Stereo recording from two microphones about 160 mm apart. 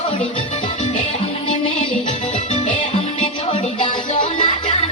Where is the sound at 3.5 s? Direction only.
35° left (ahead or behind).